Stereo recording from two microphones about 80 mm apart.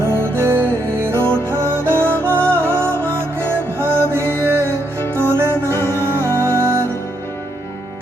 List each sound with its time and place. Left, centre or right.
0.1 s music: right
1.1 s music: left
1.5 s music: right
5.7 s music: left
6.3 s music: right